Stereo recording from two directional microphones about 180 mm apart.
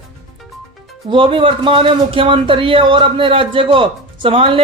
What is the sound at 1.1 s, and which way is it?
A man's voice, 30° right (ahead or behind).